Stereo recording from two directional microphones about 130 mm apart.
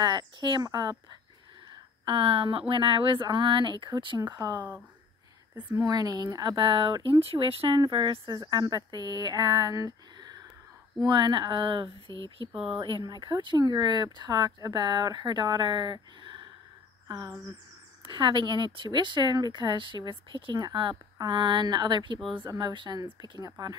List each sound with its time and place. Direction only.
0.0 s speech: 35° right (ahead or behind)
1.7 s a sound: 40° right (ahead or behind)
2.7 s speech: 40° right (ahead or behind)
4.6 s speech: 15° right (ahead or behind)
5.9 s speech: 30° right (ahead or behind)
12.5 s speech: 5° right (ahead or behind)
12.8 s speech: 35° right (ahead or behind)
17.1 s a sound: 30° right (ahead or behind)
18.0 s speech: 40° right (ahead or behind)